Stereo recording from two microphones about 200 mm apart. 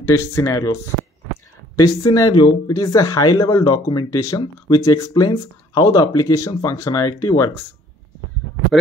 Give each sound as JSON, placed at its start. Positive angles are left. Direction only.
{"t": 0.0, "sound": "speech", "side_deg": 15}
{"t": 1.8, "sound": "speech", "side_deg": 15}